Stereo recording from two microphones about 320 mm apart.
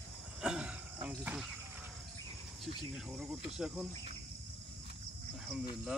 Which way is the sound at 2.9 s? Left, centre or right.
Centre.